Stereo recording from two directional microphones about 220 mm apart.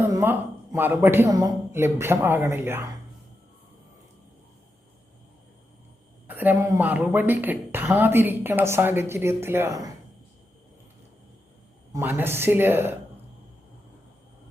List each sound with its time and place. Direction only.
0.1 s a woman's voice: 10° right (ahead or behind)
6.2 s a woman's voice: 10° right (ahead or behind)
11.9 s a woman's voice: 10° right (ahead or behind)